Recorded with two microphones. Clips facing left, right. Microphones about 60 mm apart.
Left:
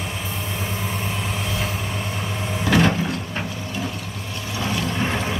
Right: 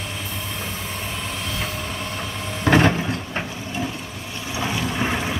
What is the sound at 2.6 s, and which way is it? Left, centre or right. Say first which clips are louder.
Vehicle: right 2 dB; right.